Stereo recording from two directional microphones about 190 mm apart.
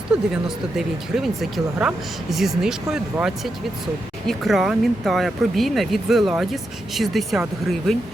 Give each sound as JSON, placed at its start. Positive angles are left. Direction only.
{"t": 0.1, "sound": "speech", "side_deg": -5}